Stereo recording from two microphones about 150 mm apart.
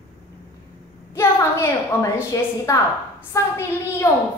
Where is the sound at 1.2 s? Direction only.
20° left (ahead or behind).